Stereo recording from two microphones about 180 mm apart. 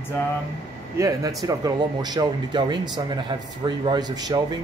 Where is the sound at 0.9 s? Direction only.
20° right (ahead or behind).